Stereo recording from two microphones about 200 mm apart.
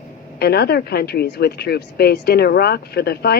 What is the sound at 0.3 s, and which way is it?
Speech, 50° left (ahead or behind).